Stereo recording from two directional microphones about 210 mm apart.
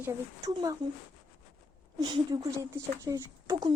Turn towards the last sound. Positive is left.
turn(degrees=-20)  # may be behind; listen again after turning